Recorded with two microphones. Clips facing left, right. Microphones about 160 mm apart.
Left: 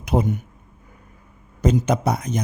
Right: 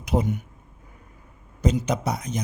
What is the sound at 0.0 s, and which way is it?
Speech, 55° left (ahead or behind).